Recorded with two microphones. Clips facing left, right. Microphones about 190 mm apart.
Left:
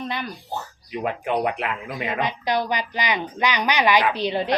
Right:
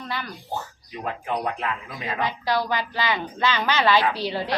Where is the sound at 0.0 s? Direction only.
20° left (ahead or behind).